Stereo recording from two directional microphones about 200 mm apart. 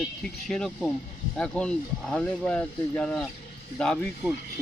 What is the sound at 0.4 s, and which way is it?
Speech, centre (ahead or behind).